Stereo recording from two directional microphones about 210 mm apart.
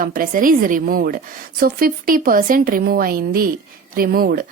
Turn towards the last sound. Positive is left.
turn(degrees=-45)  # may be behind; listen again after turning